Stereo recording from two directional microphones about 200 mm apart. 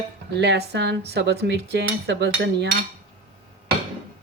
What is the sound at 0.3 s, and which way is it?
Cutlery, 55° right (ahead or behind).